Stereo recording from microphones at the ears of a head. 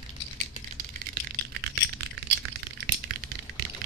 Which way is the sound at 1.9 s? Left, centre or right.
Right.